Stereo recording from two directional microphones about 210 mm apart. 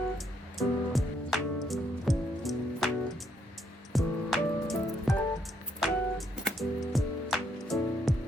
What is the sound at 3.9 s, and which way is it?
Music, centre (ahead or behind).